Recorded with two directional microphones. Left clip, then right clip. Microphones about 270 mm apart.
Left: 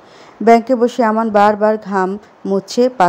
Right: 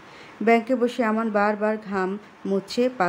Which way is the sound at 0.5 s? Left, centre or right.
Left.